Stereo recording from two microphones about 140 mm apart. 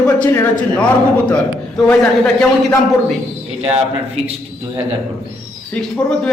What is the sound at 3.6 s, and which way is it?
Speech, 45° right (ahead or behind).